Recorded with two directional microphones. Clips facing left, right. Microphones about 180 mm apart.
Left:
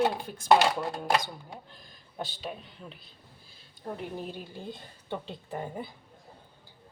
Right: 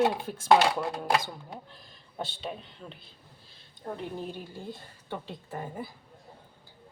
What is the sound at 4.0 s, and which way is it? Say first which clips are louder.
Speech: right 1 dB; 15° left (ahead or behind).